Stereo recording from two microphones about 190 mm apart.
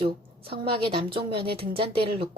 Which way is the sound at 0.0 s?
30° right (ahead or behind).